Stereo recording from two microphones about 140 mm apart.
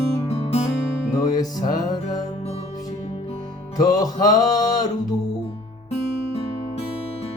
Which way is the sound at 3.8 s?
25° left (ahead or behind).